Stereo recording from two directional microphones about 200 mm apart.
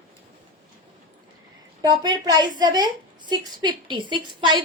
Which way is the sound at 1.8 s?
20° right (ahead or behind).